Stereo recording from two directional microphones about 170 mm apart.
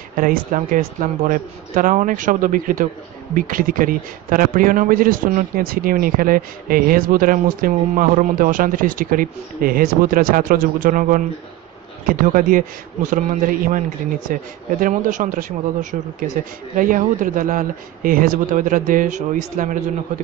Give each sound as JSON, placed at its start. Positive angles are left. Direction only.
{"t": 0.2, "sound": "speech", "side_deg": -55}